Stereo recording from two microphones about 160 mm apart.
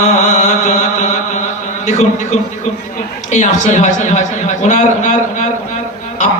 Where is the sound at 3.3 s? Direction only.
45° left (ahead or behind).